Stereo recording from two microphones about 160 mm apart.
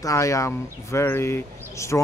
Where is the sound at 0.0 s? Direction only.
20° left (ahead or behind).